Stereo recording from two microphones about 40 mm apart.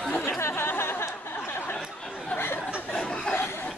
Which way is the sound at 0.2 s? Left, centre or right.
Left.